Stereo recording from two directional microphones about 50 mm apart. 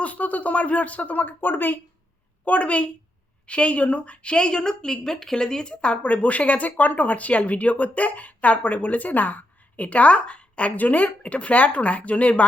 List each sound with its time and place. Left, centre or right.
0.0 s speech: left
2.4 s a woman's voice: left